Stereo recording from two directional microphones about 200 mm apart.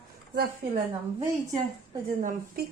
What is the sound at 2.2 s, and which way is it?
Speech, 45° right (ahead or behind).